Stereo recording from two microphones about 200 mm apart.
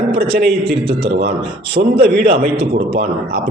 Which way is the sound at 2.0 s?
55° right (ahead or behind).